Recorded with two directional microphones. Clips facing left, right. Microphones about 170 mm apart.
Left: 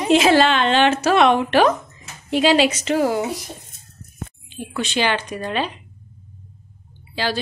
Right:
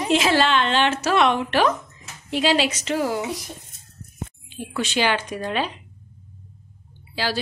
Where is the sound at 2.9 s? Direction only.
55° left (ahead or behind).